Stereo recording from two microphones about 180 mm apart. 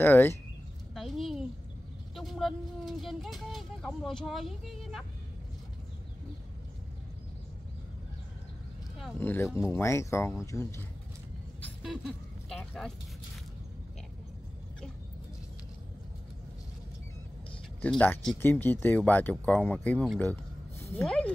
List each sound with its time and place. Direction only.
0.0 s speech: 10° left (ahead or behind)
0.9 s a sound: centre (ahead or behind)
2.1 s speech: centre (ahead or behind)
9.2 s speech: 10° left (ahead or behind)
11.8 s a sound: centre (ahead or behind)
17.8 s speech: 10° left (ahead or behind)